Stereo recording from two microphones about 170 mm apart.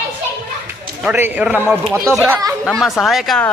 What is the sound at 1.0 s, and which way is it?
A man's voice, 10° right (ahead or behind).